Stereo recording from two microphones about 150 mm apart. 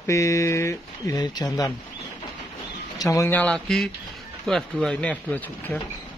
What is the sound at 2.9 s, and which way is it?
Speech, 20° left (ahead or behind).